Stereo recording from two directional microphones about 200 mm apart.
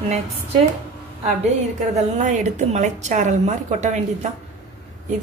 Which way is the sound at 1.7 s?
35° right (ahead or behind).